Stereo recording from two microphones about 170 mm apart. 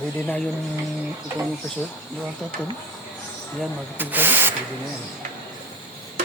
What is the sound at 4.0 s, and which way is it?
Owl, 10° right (ahead or behind).